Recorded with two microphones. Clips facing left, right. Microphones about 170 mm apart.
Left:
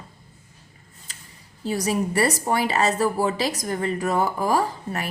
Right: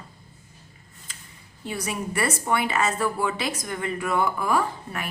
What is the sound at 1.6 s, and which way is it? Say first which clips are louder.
A woman's voice: left 7 dB; 35° left (ahead or behind).